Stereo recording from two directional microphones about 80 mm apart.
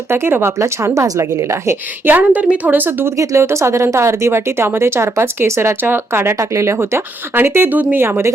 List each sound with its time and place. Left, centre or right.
0.1 s speech: right
2.0 s a woman's voice: right
3.2 s speech: right
8.0 s speech: right